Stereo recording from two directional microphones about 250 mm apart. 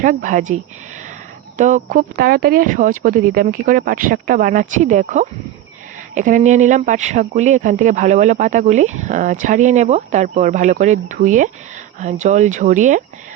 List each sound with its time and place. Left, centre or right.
0.0 s speech: right